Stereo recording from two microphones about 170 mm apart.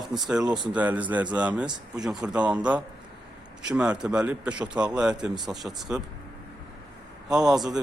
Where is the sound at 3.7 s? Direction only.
5° right (ahead or behind).